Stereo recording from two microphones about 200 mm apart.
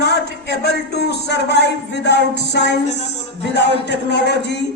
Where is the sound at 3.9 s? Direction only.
60° left (ahead or behind).